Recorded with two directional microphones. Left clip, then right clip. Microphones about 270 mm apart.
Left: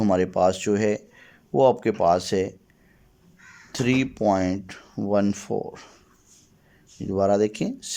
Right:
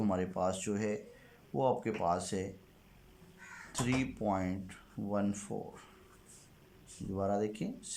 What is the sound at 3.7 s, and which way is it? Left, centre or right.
Speech, left.